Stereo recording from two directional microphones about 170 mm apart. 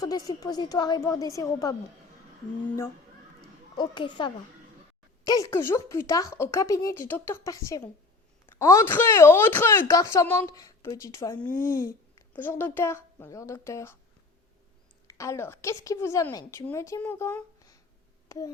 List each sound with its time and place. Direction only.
0.0 s a woman's voice: 20° left (ahead or behind)
3.8 s a woman's voice: 25° left (ahead or behind)
15.0 s speech: 15° left (ahead or behind)